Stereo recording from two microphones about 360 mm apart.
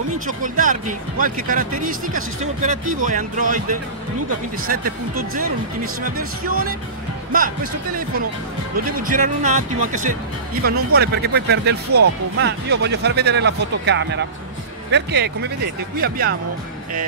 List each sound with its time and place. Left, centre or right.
0.3 s speech: right
8.8 s speech: right